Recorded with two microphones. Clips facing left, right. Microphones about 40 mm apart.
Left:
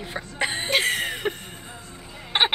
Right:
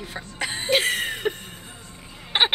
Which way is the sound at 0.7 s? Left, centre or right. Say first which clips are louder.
Right 3 dB; centre.